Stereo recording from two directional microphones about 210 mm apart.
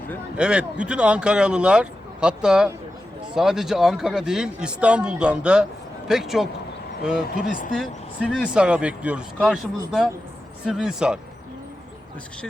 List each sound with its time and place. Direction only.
0.3 s speech: 5° right (ahead or behind)
7.3 s speech: 40° left (ahead or behind)
8.3 s speech: centre (ahead or behind)